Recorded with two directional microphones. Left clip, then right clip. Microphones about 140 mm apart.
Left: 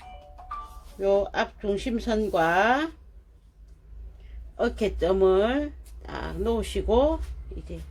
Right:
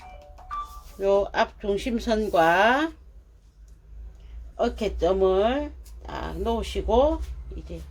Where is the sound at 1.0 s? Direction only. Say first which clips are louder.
Right 2 dB; 15° left (ahead or behind).